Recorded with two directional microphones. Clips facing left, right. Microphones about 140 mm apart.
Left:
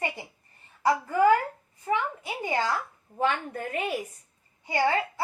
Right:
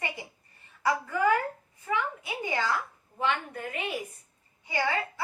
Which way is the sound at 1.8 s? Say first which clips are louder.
Left 3 dB; 35° left (ahead or behind).